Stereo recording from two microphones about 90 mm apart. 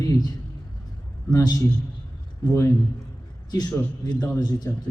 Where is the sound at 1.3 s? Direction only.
40° left (ahead or behind).